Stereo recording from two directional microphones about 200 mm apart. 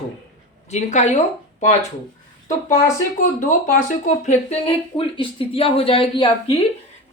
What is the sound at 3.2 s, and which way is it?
Speech, 40° left (ahead or behind).